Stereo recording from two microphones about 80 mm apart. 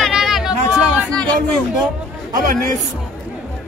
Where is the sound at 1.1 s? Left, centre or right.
Centre.